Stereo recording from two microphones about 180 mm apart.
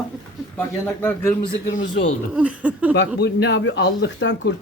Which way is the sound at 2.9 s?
70° left (ahead or behind).